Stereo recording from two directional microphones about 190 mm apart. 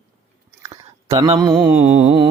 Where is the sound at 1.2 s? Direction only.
30° right (ahead or behind).